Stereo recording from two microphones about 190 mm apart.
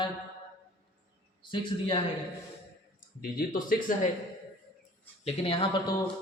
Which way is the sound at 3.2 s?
45° left (ahead or behind).